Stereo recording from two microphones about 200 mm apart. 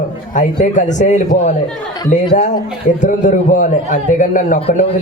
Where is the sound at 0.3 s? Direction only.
40° left (ahead or behind).